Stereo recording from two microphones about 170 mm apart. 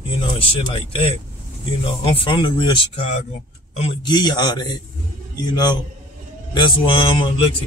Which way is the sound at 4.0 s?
25° left (ahead or behind).